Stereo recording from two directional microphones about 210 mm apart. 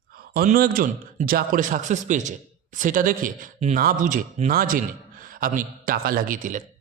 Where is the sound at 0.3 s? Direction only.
45° right (ahead or behind).